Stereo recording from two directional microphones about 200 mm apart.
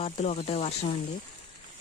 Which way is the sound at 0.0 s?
30° left (ahead or behind).